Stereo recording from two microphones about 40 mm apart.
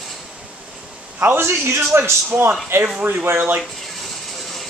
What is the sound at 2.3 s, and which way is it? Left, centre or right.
Speech, right.